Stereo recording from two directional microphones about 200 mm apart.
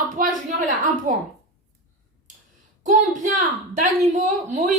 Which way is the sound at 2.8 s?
40° right (ahead or behind).